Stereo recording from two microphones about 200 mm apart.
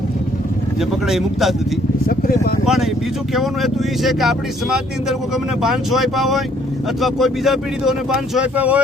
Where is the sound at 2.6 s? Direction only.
Centre (ahead or behind).